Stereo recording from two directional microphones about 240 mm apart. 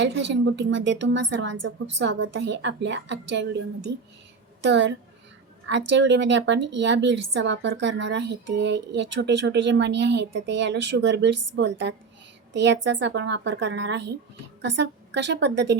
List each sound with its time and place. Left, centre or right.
0.0 s a woman's voice: right
4.6 s a woman's voice: right